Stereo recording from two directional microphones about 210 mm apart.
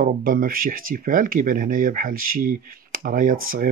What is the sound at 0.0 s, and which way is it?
Speech, 40° right (ahead or behind).